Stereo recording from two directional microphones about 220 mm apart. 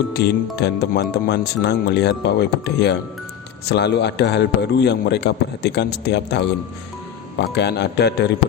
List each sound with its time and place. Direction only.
0.1 s a man's voice: 45° left (ahead or behind)